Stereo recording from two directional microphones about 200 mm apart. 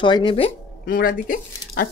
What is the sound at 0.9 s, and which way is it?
Speech, 45° left (ahead or behind).